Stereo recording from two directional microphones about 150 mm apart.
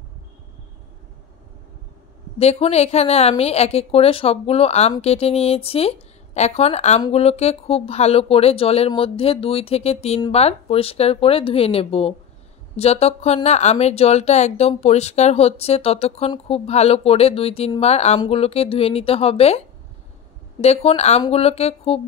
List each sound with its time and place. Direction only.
2.3 s speech: 45° left (ahead or behind)
20.6 s speech: 45° left (ahead or behind)